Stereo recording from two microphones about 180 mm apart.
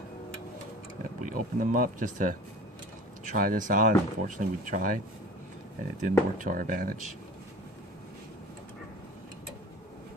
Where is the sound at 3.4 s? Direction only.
50° right (ahead or behind).